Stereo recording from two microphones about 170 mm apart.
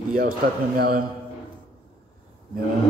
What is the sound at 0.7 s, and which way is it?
Speech, 60° right (ahead or behind).